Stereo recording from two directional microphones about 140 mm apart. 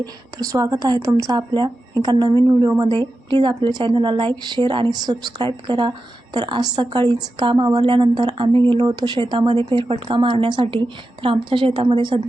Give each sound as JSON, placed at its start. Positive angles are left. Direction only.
{"t": 0.0, "sound": "a woman's voice", "side_deg": -25}